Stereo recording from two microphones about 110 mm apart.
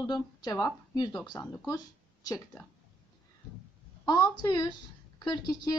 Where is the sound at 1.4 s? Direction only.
30° left (ahead or behind).